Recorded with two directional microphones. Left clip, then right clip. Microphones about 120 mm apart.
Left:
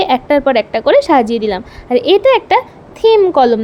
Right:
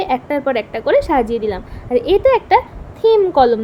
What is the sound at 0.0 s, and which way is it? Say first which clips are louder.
A woman's voice: left 6 dB; 45° left (ahead or behind).